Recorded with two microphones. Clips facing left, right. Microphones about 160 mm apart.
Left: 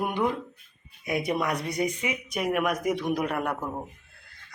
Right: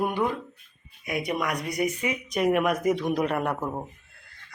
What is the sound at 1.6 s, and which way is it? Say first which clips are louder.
Speech: right 1 dB; 25° left (ahead or behind).